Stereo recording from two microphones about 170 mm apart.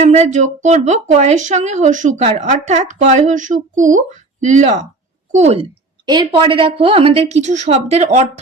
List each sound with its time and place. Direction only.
0.0 s a woman's voice: 40° right (ahead or behind)
6.1 s a woman's voice: 25° right (ahead or behind)